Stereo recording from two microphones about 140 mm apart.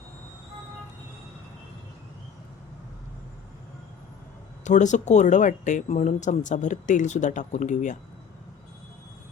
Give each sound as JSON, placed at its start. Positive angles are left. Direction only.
{"t": 4.6, "sound": "speech", "side_deg": 60}